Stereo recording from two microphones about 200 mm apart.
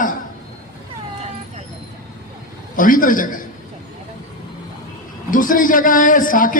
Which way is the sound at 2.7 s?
45° left (ahead or behind).